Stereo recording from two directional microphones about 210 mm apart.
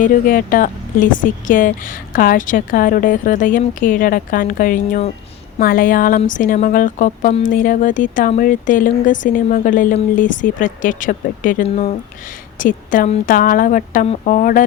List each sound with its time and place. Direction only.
0.0 s speech: 40° left (ahead or behind)